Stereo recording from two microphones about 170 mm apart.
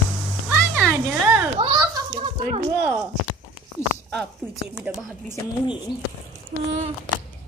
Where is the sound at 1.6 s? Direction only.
30° right (ahead or behind).